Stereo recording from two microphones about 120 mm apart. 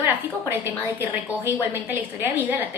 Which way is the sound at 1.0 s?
15° right (ahead or behind).